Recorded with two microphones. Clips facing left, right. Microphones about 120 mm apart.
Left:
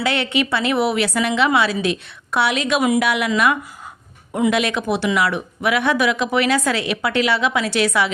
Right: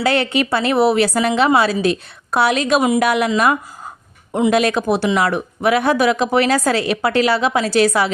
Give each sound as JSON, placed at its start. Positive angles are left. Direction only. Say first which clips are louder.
{"t": 0.0, "sound": "speech", "louder": "right 3 dB", "side_deg": -40}
{"t": 4.3, "sound": "speech", "louder": "right 2 dB", "side_deg": -25}
{"t": 4.5, "sound": "speech", "louder": "right 4 dB", "side_deg": -40}